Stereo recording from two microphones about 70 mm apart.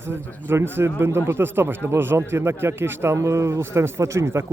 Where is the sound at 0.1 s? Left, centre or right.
Right.